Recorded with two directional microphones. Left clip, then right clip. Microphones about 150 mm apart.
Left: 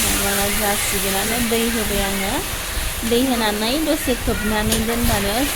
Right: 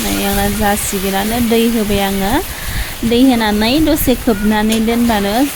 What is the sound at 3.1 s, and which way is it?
Stir, 65° right (ahead or behind).